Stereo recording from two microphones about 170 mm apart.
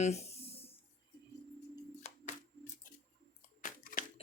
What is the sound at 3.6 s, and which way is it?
Crunch, 50° left (ahead or behind).